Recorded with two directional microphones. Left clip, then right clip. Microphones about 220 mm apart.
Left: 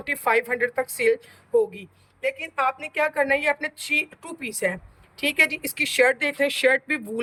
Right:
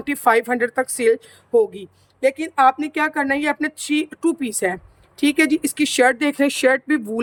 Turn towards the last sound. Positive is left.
turn(degrees=-20)  # may be behind; listen again after turning